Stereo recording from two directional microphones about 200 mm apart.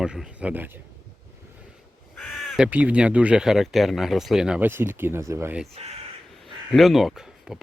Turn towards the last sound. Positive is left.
turn(degrees=0)  # may be behind; listen again after turning